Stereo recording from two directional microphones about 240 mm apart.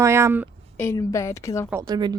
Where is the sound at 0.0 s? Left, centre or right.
Centre.